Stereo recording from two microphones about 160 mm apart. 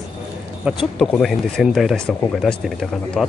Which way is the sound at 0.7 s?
Centre (ahead or behind).